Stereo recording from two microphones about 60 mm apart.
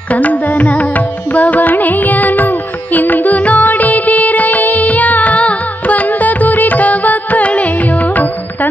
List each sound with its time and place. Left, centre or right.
0.1 s music: left